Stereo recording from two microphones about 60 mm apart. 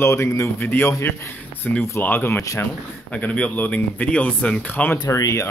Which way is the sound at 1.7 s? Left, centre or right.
Centre.